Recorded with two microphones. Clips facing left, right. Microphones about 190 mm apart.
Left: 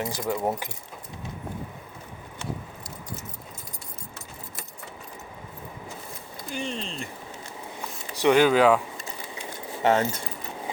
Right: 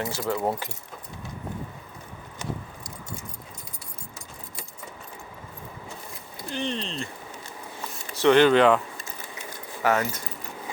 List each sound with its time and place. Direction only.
0.0 s speech: 15° left (ahead or behind)
6.5 s speech: 10° left (ahead or behind)
7.8 s a sound: 10° left (ahead or behind)
9.8 s speech: 30° left (ahead or behind)